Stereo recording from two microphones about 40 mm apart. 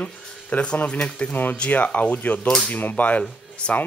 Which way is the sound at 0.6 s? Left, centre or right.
Left.